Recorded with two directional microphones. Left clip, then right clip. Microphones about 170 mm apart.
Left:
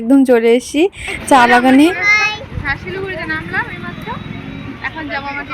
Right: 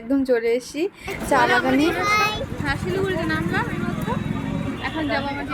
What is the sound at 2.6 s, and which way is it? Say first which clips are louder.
Speech: left 4 dB; 10° right (ahead or behind).